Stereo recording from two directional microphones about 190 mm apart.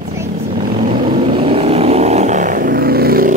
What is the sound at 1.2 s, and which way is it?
Vehicle, 30° right (ahead or behind).